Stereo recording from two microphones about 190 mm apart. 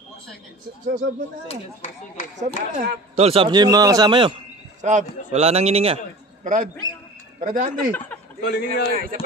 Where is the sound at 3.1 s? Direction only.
30° right (ahead or behind).